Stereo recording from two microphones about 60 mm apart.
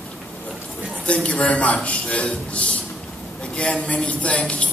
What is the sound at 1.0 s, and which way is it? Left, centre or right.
A man's voice, left.